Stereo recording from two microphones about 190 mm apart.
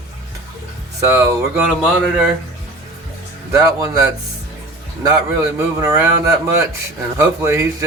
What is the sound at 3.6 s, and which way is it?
Speech, 15° right (ahead or behind).